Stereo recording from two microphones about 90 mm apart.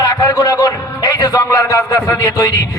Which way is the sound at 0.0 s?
45° left (ahead or behind).